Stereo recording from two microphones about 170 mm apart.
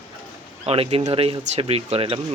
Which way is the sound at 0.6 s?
35° right (ahead or behind).